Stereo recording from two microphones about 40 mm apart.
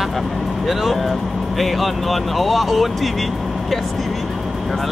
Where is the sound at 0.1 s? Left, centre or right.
Centre.